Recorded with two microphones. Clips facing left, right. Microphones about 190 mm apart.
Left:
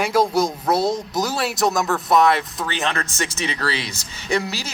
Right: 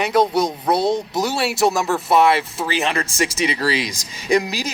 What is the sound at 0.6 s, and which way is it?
Speech, centre (ahead or behind).